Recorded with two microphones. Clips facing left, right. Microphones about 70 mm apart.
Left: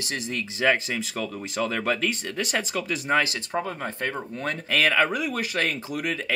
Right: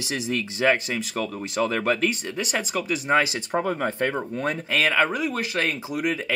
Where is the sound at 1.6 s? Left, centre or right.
Centre.